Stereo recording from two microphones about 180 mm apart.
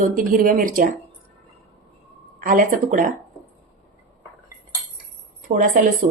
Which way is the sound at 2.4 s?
50° right (ahead or behind).